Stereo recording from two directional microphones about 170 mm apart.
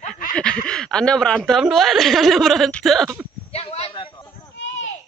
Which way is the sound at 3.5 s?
35° left (ahead or behind).